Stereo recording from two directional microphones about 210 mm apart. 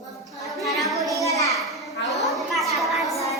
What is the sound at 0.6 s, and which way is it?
Music, centre (ahead or behind).